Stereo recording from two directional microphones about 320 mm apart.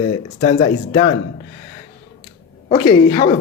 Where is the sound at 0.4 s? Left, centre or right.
Left.